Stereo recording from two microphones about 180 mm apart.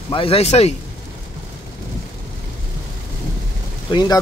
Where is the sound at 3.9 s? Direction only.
25° left (ahead or behind).